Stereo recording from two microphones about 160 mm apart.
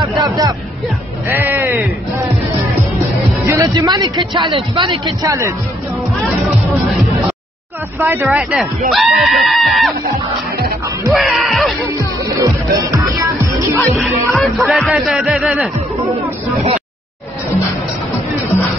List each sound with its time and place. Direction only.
0.2 s speech: 25° right (ahead or behind)
1.2 s music: 15° right (ahead or behind)
3.4 s music: 25° right (ahead or behind)
4.4 s speech: 30° right (ahead or behind)
5.2 s speech: 20° right (ahead or behind)
8.0 s speech: 15° right (ahead or behind)
11.1 s speech: centre (ahead or behind)
12.3 s music: 20° right (ahead or behind)
13.7 s speech: centre (ahead or behind)